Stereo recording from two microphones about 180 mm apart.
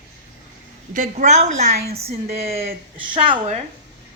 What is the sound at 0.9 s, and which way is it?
A woman's voice, 45° right (ahead or behind).